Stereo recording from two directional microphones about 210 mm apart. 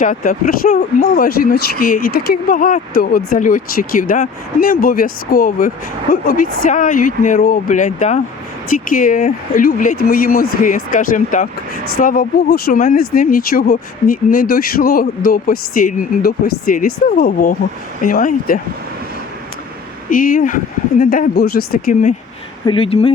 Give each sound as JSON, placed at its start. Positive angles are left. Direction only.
{"t": 0.0, "sound": "speech", "side_deg": 40}
{"t": 20.1, "sound": "speech", "side_deg": 40}
{"t": 22.6, "sound": "speech", "side_deg": 25}